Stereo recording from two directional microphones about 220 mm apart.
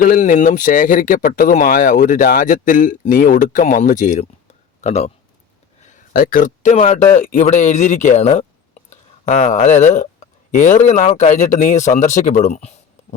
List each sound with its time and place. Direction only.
0.0 s speech: 40° left (ahead or behind)